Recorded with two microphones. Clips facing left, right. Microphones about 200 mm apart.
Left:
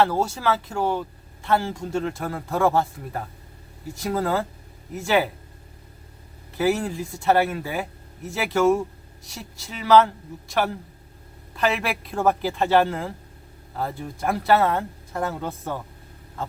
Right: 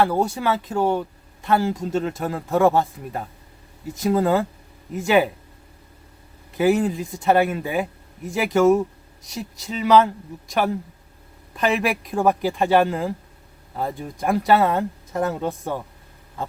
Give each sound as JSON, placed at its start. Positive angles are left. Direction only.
{"t": 0.0, "sound": "speech", "side_deg": -15}
{"t": 6.6, "sound": "speech", "side_deg": -15}
{"t": 11.5, "sound": "speech", "side_deg": -15}